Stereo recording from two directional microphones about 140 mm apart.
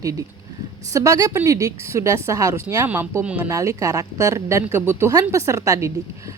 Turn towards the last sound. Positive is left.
turn(degrees=-20)  # may be behind; listen again after turning